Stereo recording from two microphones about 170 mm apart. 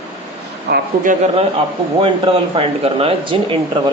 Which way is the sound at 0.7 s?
80° right.